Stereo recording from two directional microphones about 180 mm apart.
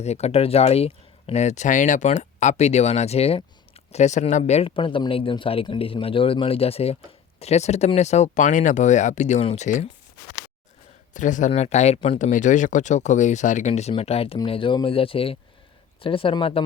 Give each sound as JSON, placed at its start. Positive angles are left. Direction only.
{"t": 0.0, "sound": "speech", "side_deg": 35}
{"t": 11.1, "sound": "speech", "side_deg": 45}